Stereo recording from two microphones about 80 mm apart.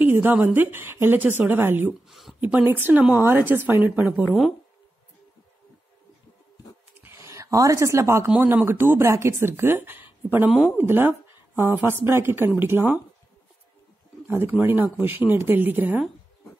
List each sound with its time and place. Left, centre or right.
0.0 s a woman's voice: right
2.0 s speech: centre
2.4 s a woman's voice: right
4.3 s speech: centre
7.0 s a sound: right
7.2 s speech: right
8.5 s a woman's voice: right
14.2 s a woman's voice: right